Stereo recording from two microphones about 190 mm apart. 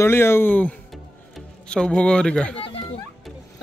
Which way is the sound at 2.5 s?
30° left (ahead or behind).